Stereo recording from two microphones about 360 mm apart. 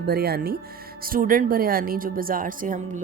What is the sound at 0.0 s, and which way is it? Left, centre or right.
Speech, right.